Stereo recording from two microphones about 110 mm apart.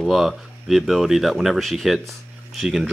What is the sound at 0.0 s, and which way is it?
Speech, centre (ahead or behind).